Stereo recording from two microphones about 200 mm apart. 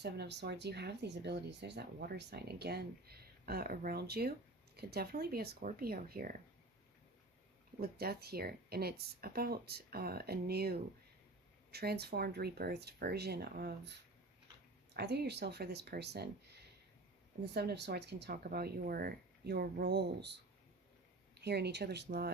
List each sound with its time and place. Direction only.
0.0 s speech: 55° right (ahead or behind)
7.8 s speech: 50° right (ahead or behind)
17.4 s speech: 55° right (ahead or behind)
21.4 s speech: 55° right (ahead or behind)